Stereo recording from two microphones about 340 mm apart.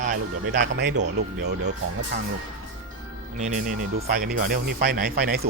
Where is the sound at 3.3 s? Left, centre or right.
Right.